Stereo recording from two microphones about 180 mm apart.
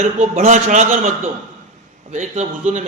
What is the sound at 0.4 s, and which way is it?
Speech, 45° right (ahead or behind).